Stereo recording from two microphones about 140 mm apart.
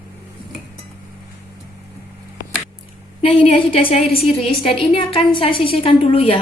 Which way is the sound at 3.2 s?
45° left (ahead or behind).